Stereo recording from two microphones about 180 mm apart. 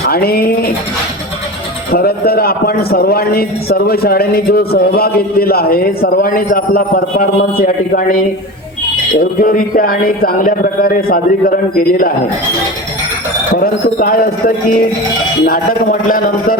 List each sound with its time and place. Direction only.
0.0 s a man's voice: 60° left (ahead or behind)
1.9 s a man's voice: 60° left (ahead or behind)
9.4 s a man's voice: 55° left (ahead or behind)
13.6 s a man's voice: 55° left (ahead or behind)